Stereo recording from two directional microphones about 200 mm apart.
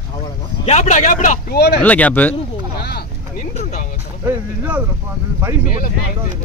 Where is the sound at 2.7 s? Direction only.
50° left (ahead or behind).